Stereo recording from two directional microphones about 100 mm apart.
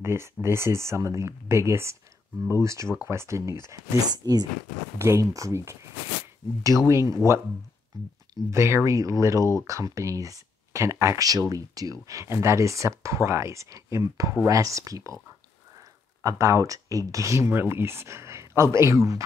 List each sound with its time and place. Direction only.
0.0 s speech: 25° right (ahead or behind); by 4.5 s 40° right (ahead or behind)
4.9 s speech: 30° right (ahead or behind)
6.9 s speech: 30° right (ahead or behind)
8.5 s speech: 25° right (ahead or behind)
16.2 s speech: 30° right (ahead or behind)